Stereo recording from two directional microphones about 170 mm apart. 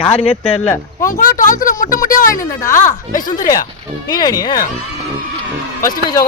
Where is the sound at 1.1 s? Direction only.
50° left (ahead or behind).